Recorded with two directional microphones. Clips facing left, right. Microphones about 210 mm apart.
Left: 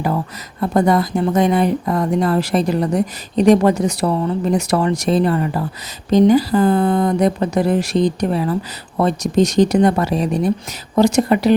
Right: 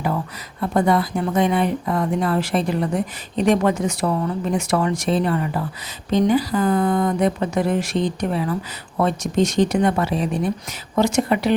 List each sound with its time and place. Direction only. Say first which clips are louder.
0.6 s speech: left 3 dB; 40° left (ahead or behind)